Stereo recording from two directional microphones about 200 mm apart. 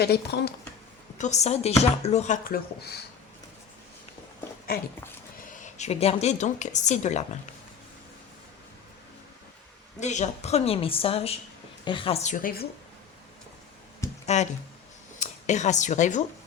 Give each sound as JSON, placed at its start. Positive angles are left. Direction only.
{"t": 0.0, "sound": "speech", "side_deg": 55}
{"t": 1.2, "sound": "speech", "side_deg": 35}
{"t": 5.4, "sound": "a woman's voice", "side_deg": 40}
{"t": 10.0, "sound": "a woman's voice", "side_deg": 35}
{"t": 14.3, "sound": "speech", "side_deg": 35}